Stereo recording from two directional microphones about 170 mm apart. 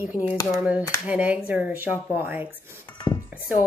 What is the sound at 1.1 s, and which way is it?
Speech, 10° right (ahead or behind).